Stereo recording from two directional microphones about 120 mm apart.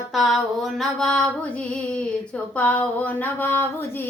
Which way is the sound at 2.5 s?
15° left (ahead or behind).